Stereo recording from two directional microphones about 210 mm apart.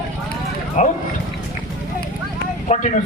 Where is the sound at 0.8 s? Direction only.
35° left (ahead or behind).